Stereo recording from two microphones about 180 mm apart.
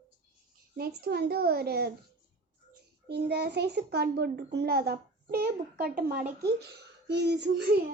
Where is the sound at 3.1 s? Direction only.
65° right (ahead or behind).